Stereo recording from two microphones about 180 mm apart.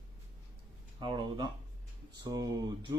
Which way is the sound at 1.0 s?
25° right (ahead or behind).